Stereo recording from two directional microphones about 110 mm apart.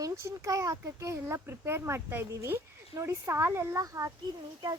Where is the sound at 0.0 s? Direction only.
30° right (ahead or behind).